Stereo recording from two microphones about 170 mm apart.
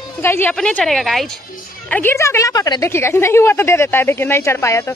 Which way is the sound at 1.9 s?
15° left (ahead or behind).